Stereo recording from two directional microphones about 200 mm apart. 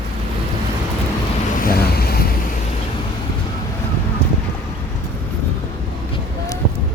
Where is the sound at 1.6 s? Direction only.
50° left (ahead or behind).